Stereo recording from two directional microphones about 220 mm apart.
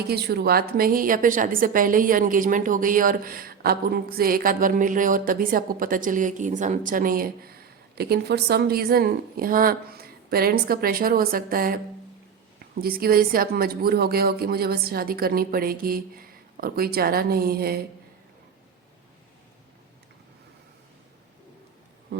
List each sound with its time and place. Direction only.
0.1 s a woman's voice: 45° right (ahead or behind)